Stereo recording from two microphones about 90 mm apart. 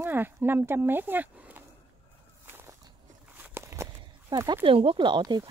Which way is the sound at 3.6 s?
30° right (ahead or behind).